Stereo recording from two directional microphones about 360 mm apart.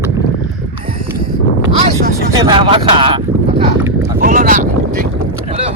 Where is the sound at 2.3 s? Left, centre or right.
Centre.